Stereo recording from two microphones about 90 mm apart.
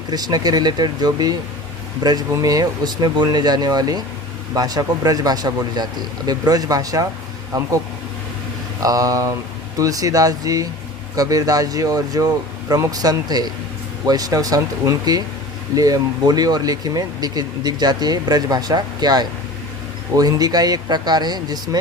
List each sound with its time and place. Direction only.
0.1 s speech: 45° right (ahead or behind)
8.8 s speech: 40° right (ahead or behind)